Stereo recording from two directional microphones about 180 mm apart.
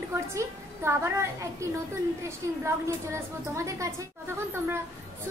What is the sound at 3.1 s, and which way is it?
Speech, 15° right (ahead or behind).